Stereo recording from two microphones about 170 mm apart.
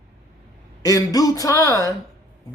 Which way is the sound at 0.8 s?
20° left (ahead or behind).